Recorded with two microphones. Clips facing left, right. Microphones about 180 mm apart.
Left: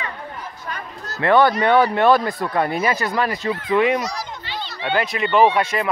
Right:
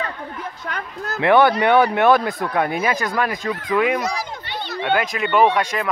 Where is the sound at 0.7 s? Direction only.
70° right (ahead or behind).